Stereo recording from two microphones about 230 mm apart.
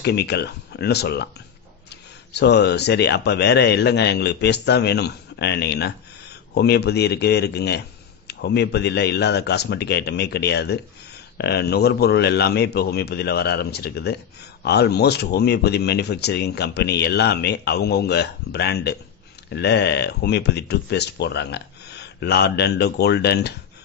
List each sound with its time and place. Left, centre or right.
0.0 s speech: left
2.3 s speech: left